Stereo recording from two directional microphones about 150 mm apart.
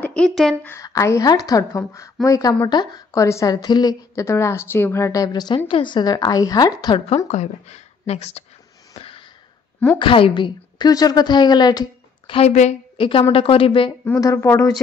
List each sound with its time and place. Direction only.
0.0 s speech: 5° left (ahead or behind)
0.7 s a woman's voice: 20° left (ahead or behind)
7.2 s speech: 50° left (ahead or behind)
8.9 s a sound: 40° left (ahead or behind)
9.9 s a woman's voice: 35° left (ahead or behind)
12.4 s a woman's voice: 45° left (ahead or behind)
14.2 s a woman's voice: 20° left (ahead or behind)